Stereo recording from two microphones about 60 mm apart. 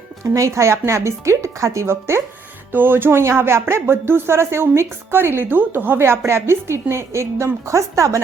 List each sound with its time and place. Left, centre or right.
0.3 s speech: right
2.7 s speech: right